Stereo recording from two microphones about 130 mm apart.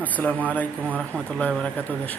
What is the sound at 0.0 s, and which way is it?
Speech, 10° left (ahead or behind).